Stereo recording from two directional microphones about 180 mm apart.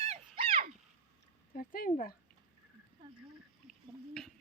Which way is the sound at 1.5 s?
50° left (ahead or behind).